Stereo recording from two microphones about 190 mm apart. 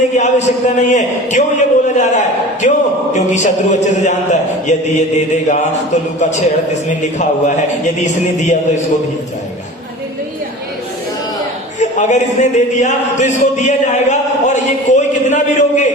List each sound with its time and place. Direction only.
0.2 s a man's voice: 35° left (ahead or behind)
11.8 s speech: 40° left (ahead or behind)